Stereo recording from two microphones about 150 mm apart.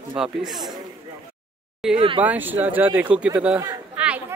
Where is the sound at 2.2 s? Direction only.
10° right (ahead or behind).